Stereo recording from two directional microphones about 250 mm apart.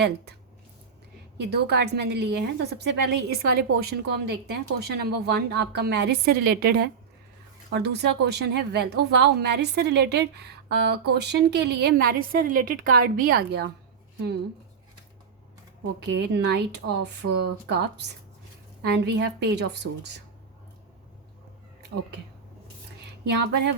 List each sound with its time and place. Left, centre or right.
1.4 s a woman's voice: right
16.0 s a woman's voice: right
23.2 s a woman's voice: right